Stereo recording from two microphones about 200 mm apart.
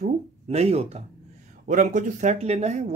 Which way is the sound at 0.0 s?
30° right (ahead or behind).